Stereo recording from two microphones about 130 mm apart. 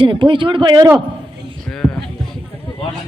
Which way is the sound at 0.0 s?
40° right (ahead or behind).